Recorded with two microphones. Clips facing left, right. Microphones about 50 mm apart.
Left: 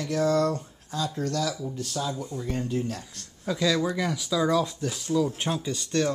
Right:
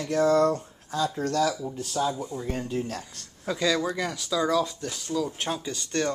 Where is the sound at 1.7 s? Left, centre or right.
Centre.